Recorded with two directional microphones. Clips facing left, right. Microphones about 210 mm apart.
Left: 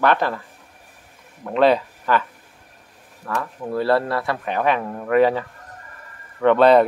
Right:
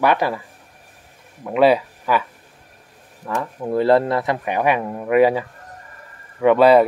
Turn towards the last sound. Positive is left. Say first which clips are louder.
# right 1 dB
turn(degrees=-10)  # may be behind; listen again after turning